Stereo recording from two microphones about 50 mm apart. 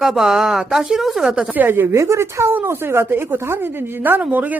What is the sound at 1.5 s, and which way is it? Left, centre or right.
Speech, right.